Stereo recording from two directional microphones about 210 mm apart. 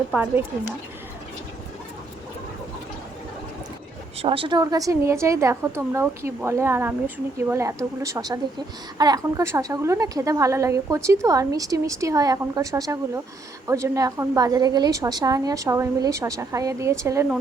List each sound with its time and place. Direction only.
0.1 s a woman's voice: 5° right (ahead or behind)
4.2 s a woman's voice: 25° right (ahead or behind)